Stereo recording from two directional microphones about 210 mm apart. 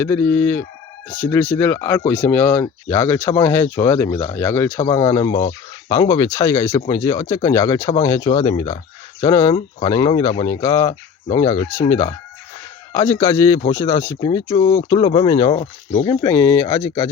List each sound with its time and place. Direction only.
0.0 s speech: 10° left (ahead or behind)